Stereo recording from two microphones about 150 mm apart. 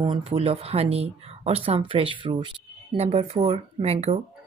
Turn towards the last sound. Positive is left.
turn(degrees=-45)  # may be behind; listen again after turning